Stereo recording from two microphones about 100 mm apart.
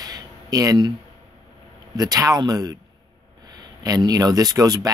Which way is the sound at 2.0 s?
40° right (ahead or behind).